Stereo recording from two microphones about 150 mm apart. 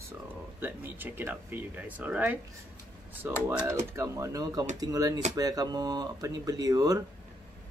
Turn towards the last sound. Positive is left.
turn(degrees=-25)  # may be behind; listen again after turning